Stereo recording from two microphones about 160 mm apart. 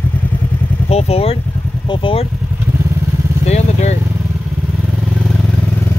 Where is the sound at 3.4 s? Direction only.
45° left (ahead or behind).